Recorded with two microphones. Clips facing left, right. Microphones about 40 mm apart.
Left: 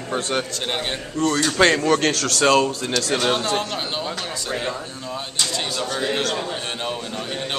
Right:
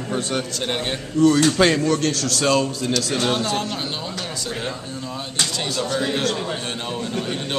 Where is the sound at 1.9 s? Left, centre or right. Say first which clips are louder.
Left 2 dB; left.